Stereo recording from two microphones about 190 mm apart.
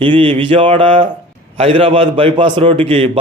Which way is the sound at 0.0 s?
25° right (ahead or behind).